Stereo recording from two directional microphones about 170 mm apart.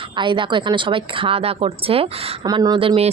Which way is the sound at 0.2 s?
30° right (ahead or behind).